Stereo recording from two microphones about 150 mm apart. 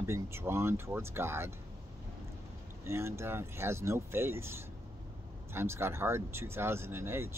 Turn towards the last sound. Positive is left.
turn(degrees=-15)  # may be behind; listen again after turning